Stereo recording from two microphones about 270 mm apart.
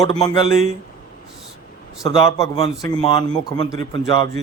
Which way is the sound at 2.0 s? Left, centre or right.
Centre.